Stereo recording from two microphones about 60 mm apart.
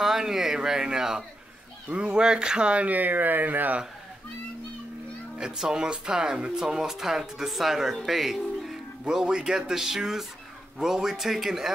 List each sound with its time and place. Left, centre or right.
0.0 s speech: centre; by 3.8 s right
5.4 s speech: centre